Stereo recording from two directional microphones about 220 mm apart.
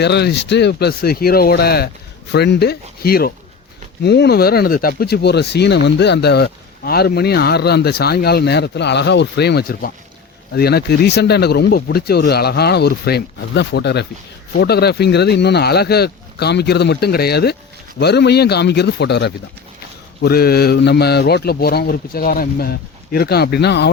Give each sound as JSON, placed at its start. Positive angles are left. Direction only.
{"t": 0.0, "sound": "speech", "side_deg": 50}